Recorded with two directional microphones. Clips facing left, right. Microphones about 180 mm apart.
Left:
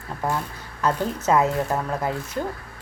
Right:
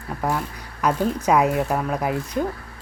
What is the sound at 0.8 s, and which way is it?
Speech, 15° right (ahead or behind).